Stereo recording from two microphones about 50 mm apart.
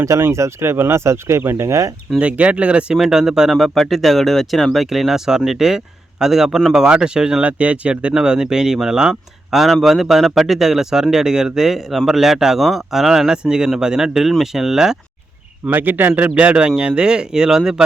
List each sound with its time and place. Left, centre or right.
0.0 s speech: right
2.1 s speech: right
2.9 s speech: centre
7.4 s speech: right; by 14.9 s centre
15.7 s speech: right; by 17.8 s centre